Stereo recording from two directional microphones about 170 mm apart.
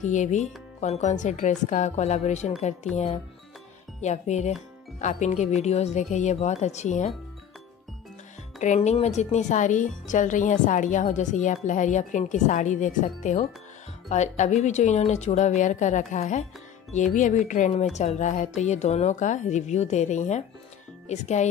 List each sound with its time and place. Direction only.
0.0 s speech: 45° left (ahead or behind)
4.0 s speech: 40° left (ahead or behind)
8.5 s speech: 40° left (ahead or behind)